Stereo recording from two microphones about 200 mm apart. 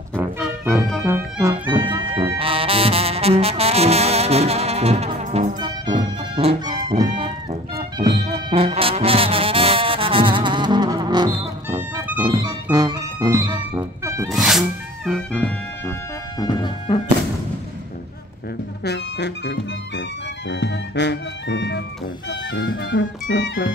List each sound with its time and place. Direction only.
0.1 s music: 10° right (ahead or behind)
2.3 s brass instrument: 30° right (ahead or behind)
5.6 s music: 25° right (ahead or behind)
7.7 s brass instrument: 25° right (ahead or behind)
12.2 s music: 20° right (ahead or behind)
14.3 s music: centre (ahead or behind)
16.3 s music: 20° left (ahead or behind)
18.9 s music: 60° left (ahead or behind)
22.3 s music: 75° left (ahead or behind)